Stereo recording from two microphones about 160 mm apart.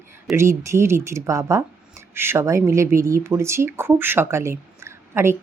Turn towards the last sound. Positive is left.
turn(degrees=-15)  # may be behind; listen again after turning